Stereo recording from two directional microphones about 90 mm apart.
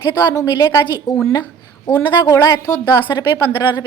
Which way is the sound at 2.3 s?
45° left (ahead or behind).